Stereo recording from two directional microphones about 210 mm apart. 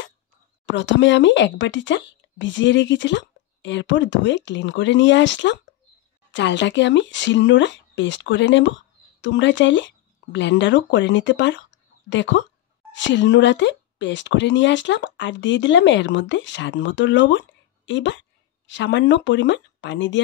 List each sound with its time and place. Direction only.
0.7 s speech: 60° left (ahead or behind)